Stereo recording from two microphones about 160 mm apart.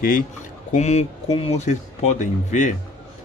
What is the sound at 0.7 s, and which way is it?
Speech, 45° left (ahead or behind).